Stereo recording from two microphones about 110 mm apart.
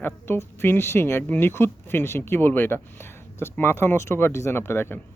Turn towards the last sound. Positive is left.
turn(degrees=20)  # may be behind; listen again after turning